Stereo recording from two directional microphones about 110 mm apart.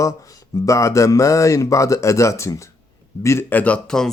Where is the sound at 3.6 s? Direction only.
10° left (ahead or behind).